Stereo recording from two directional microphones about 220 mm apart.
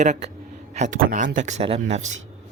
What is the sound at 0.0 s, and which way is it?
Speech, 30° right (ahead or behind).